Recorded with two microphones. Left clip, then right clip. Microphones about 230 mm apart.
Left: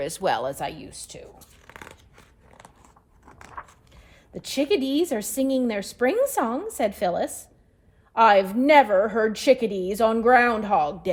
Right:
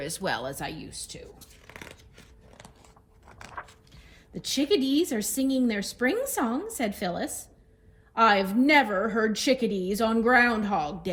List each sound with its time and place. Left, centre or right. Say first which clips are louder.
0.0 s a woman's voice: left 6 dB; left
1.4 s a sound: left 1 dB; left
3.2 s keys jangling: left 1 dB; centre
4.3 s a woman's voice: left 2 dB; left